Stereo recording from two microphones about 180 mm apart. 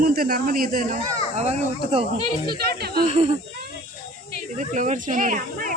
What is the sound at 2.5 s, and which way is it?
Speech, 60° right (ahead or behind).